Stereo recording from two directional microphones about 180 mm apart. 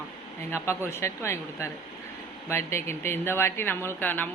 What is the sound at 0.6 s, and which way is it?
Speech, 15° left (ahead or behind).